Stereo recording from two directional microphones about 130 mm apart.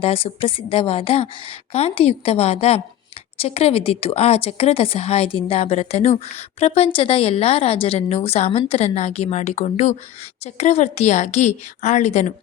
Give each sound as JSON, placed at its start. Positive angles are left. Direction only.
{"t": 0.0, "sound": "a woman's voice", "side_deg": 45}